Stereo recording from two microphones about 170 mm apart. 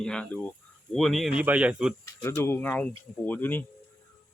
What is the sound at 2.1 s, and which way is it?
Speech, 15° left (ahead or behind).